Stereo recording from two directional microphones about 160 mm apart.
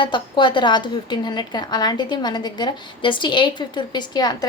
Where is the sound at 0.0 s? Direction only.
30° left (ahead or behind).